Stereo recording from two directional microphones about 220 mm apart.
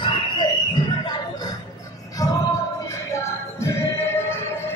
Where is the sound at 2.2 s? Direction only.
15° left (ahead or behind).